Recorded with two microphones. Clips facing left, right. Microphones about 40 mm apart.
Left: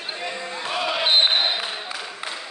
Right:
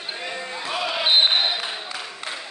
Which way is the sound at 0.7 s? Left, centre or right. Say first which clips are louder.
Even; centre.